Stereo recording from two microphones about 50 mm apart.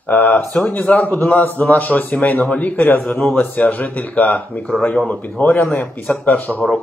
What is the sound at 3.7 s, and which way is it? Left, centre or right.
A man's voice, left.